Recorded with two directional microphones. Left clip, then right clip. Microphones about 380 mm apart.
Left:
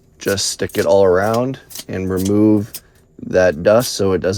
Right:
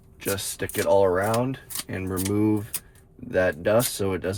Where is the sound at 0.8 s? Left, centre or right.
Centre.